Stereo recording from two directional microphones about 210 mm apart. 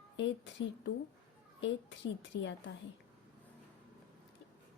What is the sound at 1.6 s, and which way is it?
Speech, 60° left (ahead or behind).